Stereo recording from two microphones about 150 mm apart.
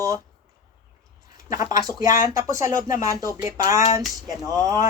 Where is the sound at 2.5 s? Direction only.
20° right (ahead or behind).